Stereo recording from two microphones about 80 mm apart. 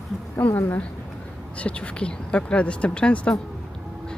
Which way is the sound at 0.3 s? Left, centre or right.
Left.